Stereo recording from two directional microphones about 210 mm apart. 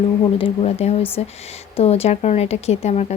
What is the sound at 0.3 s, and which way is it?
Speech, 25° left (ahead or behind).